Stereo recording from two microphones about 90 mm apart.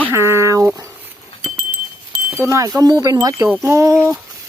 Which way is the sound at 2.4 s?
35° right (ahead or behind).